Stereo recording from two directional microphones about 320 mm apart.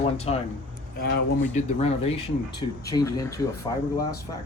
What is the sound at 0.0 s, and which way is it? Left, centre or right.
Speech, centre.